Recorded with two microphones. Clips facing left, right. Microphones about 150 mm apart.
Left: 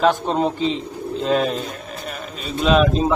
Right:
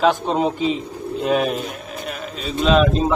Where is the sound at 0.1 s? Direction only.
5° right (ahead or behind).